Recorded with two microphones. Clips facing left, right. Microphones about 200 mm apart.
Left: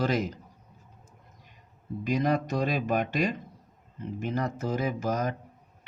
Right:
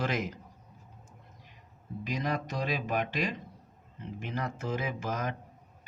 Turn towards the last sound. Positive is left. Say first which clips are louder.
# left 5 dB
turn(degrees=40)  # may be behind; listen again after turning